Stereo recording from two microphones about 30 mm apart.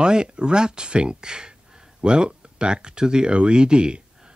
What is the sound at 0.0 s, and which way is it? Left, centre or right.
Speech, right.